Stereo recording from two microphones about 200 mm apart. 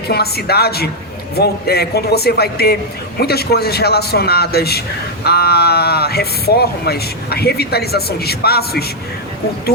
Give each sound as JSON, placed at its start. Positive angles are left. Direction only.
{"t": 0.1, "sound": "speech", "side_deg": 50}